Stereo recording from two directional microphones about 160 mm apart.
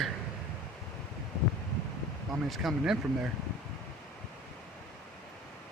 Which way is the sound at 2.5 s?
Centre (ahead or behind).